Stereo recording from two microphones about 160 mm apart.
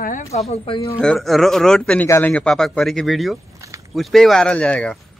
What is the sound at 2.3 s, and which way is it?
Speech, 5° left (ahead or behind).